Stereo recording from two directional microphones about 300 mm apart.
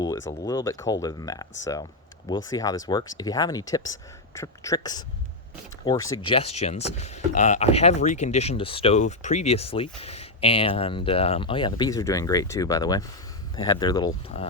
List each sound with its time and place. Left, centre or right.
0.0 s speech: centre